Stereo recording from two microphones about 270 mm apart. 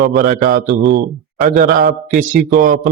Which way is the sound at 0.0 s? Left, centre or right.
Right.